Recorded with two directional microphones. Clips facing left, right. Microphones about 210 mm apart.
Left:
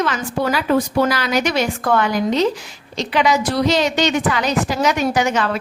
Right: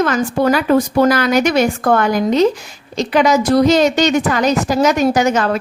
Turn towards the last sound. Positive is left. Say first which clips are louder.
# right 4 dB
turn(degrees=-45)  # may be behind; listen again after turning